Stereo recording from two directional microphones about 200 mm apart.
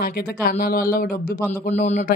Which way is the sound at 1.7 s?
35° left (ahead or behind).